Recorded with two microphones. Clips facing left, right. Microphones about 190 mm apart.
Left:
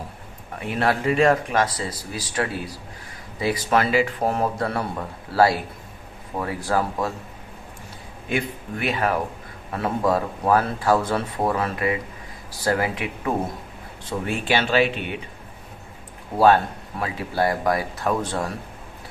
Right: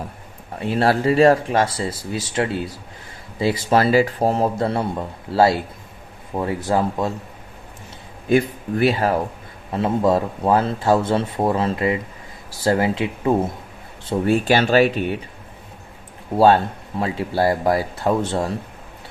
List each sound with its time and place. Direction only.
0.6 s speech: 30° right (ahead or behind)
8.3 s speech: 40° right (ahead or behind)
14.1 s speech: 40° right (ahead or behind)
17.0 s speech: 30° right (ahead or behind)